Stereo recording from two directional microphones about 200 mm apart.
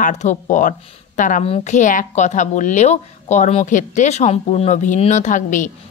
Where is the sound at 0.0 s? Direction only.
35° left (ahead or behind).